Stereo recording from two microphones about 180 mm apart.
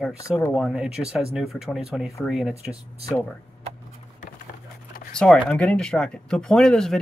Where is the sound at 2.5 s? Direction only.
35° right (ahead or behind).